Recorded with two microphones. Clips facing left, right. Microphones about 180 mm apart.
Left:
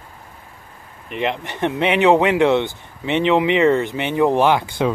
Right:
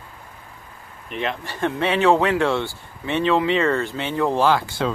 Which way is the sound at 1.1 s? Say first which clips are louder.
Left 4 dB; 20° left (ahead or behind).